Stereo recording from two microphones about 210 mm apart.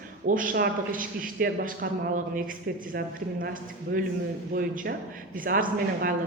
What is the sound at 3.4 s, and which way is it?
Speech, 40° right (ahead or behind).